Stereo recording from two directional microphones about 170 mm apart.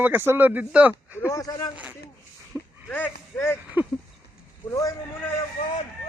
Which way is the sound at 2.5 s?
10° right (ahead or behind).